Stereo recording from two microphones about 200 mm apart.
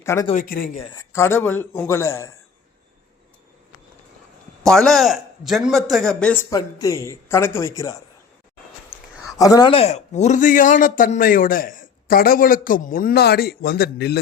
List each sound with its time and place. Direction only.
0.0 s speech: 15° left (ahead or behind)
0.3 s speech: 45° left (ahead or behind)
0.9 s a man's voice: 15° left (ahead or behind)
4.6 s a man's voice: centre (ahead or behind)
9.4 s speech: 20° left (ahead or behind); by 14.2 s 55° left (ahead or behind)